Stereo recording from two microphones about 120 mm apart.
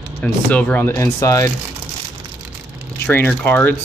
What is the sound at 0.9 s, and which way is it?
Speech, 30° left (ahead or behind).